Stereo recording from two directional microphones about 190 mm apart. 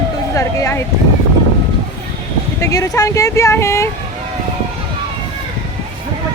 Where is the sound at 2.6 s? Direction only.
20° left (ahead or behind).